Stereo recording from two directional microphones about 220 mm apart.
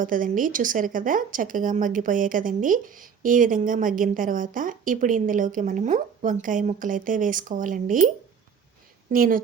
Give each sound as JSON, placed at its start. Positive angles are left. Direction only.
{"t": 0.0, "sound": "a woman's voice", "side_deg": -40}
{"t": 9.1, "sound": "a woman's voice", "side_deg": -40}